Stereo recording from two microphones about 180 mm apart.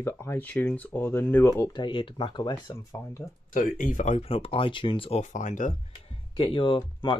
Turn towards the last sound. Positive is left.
turn(degrees=30)  # may be behind; listen again after turning